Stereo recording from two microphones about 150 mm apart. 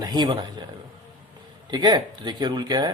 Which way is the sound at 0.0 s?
30° right (ahead or behind).